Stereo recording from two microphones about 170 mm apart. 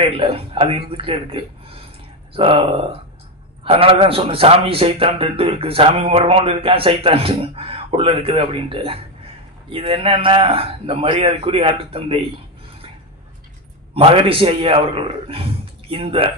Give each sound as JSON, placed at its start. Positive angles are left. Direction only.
{"t": 0.0, "sound": "a man's voice", "side_deg": -30}
{"t": 13.9, "sound": "a man's voice", "side_deg": -30}